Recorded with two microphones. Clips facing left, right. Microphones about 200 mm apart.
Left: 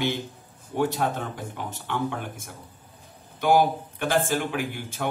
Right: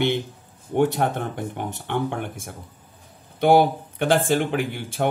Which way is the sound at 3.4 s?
60° right (ahead or behind).